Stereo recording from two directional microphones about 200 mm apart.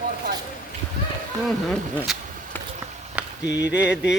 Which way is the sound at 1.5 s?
5° left (ahead or behind).